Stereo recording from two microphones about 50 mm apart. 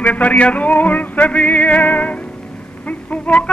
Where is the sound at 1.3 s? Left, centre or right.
Left.